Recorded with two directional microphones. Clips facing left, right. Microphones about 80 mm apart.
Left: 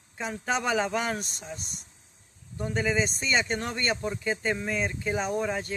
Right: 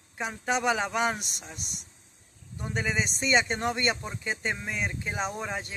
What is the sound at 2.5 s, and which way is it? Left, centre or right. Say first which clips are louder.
Speech: left 3 dB; right.